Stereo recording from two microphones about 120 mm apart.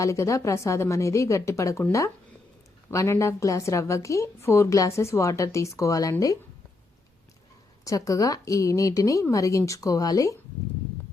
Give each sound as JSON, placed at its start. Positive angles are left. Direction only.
{"t": 0.0, "sound": "a woman's voice", "side_deg": 25}
{"t": 2.9, "sound": "a woman's voice", "side_deg": 25}
{"t": 7.9, "sound": "a woman's voice", "side_deg": 30}